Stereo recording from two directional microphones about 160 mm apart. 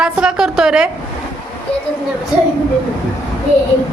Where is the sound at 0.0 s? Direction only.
5° right (ahead or behind).